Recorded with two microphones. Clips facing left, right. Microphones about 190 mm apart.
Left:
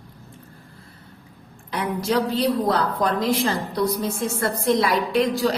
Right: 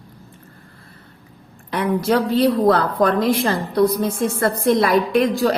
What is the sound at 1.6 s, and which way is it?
A woman's voice, 55° right (ahead or behind).